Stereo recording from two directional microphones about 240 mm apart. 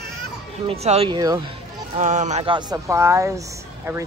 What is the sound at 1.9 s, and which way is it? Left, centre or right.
Speech, right.